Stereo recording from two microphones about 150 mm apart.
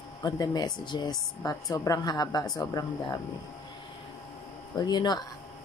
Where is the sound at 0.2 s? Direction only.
25° left (ahead or behind).